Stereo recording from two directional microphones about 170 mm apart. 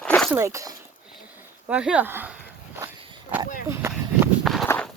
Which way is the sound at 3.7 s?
15° right (ahead or behind).